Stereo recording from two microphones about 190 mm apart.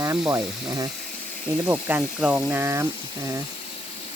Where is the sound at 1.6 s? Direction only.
10° right (ahead or behind).